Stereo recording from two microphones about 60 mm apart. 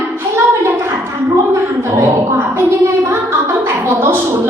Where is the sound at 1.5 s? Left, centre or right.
Right.